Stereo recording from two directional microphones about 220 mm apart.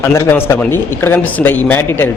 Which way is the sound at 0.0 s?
10° left (ahead or behind).